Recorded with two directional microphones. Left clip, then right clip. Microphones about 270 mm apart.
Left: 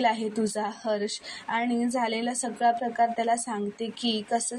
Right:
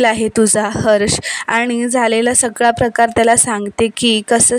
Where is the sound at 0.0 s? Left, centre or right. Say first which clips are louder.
Right 13 dB; right.